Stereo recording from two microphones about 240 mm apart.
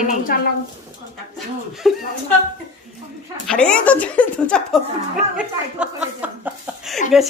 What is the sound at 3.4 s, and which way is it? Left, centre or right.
Speech, centre.